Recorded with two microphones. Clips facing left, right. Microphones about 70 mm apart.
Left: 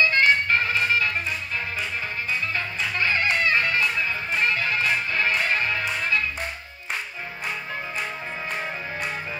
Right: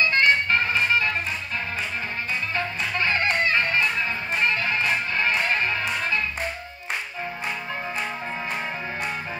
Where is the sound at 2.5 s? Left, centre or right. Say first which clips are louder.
Right 1 dB; right.